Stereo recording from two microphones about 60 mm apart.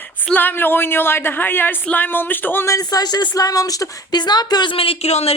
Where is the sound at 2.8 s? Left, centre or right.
Left.